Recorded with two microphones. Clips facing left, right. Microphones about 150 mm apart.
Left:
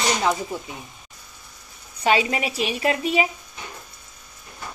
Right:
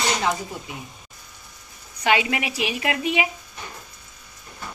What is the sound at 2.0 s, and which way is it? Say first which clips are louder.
Speech: left 1 dB; 30° left (ahead or behind).